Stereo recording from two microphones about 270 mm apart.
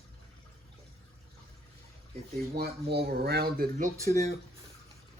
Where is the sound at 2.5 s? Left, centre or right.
Right.